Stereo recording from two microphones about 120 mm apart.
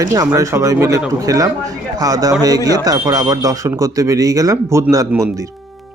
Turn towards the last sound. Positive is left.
turn(degrees=-30)  # may be behind; listen again after turning